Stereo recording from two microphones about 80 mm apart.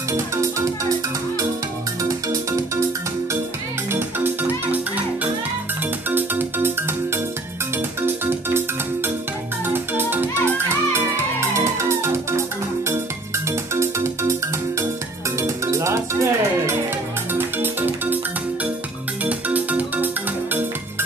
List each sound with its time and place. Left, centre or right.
0.1 s music: right
2.0 s music: right
3.9 s music: right
8.3 s music: right
13.5 s ringtone: right
15.3 s music: right
19.2 s music: centre